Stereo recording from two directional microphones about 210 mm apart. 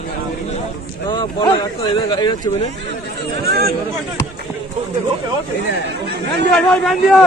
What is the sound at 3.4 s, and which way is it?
Speech, 50° right (ahead or behind).